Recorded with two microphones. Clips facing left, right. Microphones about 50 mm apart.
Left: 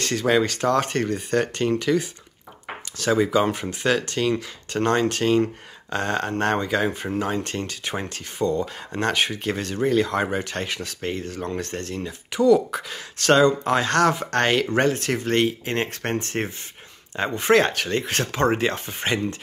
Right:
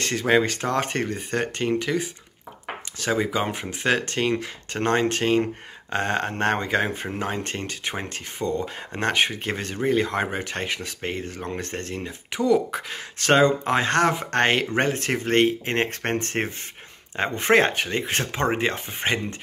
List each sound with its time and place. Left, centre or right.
0.0 s speech: right
3.8 s speech: right
17.8 s speech: centre